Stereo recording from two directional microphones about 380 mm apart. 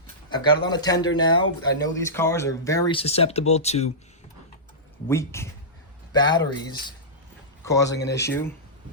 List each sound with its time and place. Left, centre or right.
0.3 s speech: centre
5.0 s speech: centre
7.9 s speech: left